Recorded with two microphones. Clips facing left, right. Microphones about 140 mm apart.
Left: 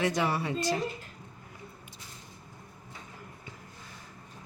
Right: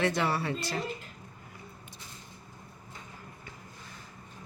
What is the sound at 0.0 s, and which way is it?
Speech, 15° left (ahead or behind).